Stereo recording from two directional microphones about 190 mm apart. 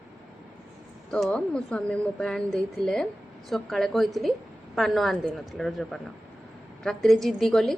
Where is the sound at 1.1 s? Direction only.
5° left (ahead or behind).